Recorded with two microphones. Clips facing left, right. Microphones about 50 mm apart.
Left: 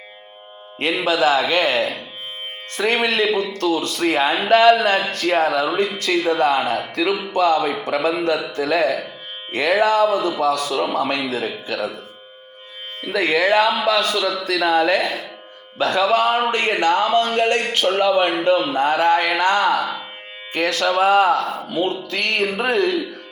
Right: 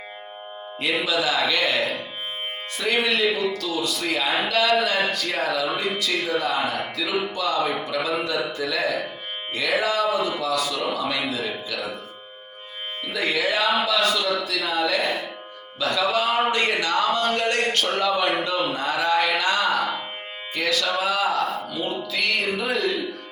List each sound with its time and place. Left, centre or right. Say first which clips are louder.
1.0 s speech: left 8 dB; left
2.7 s speech: left 4 dB; left
13.1 s speech: left 7 dB; left
14.4 s speech: left 7 dB; left
15.0 s speech: left 1 dB; centre
15.8 s speech: left 5 dB; left
17.2 s a man's voice: left 3 dB; left